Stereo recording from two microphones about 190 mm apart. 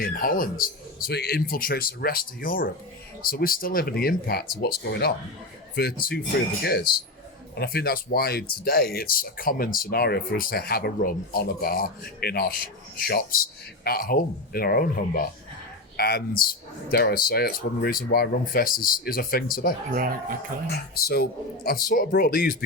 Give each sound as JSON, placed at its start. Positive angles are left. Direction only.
{"t": 0.0, "sound": "speech", "side_deg": 50}
{"t": 19.9, "sound": "speech", "side_deg": -50}
{"t": 20.7, "sound": "speech", "side_deg": 55}